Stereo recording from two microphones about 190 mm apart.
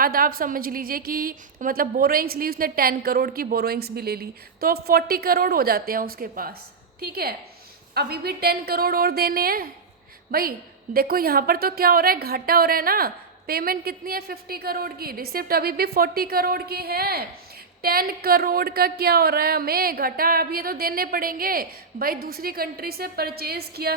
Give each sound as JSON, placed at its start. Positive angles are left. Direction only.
{"t": 0.0, "sound": "a woman's voice", "side_deg": -50}
{"t": 10.9, "sound": "a woman's voice", "side_deg": -50}